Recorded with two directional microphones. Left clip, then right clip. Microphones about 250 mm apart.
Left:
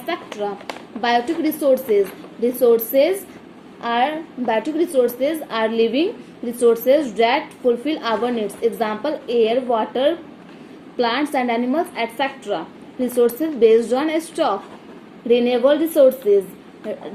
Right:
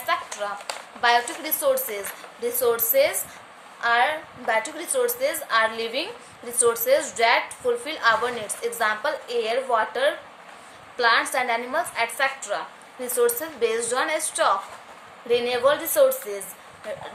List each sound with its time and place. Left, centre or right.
0.1 s a woman's voice: centre